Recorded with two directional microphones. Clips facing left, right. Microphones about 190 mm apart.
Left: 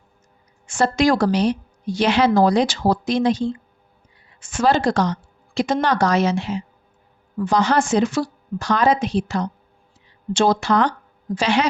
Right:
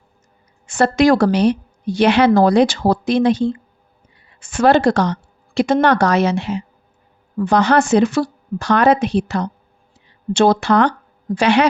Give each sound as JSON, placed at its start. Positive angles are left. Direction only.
{"t": 0.7, "sound": "a woman's voice", "side_deg": -60}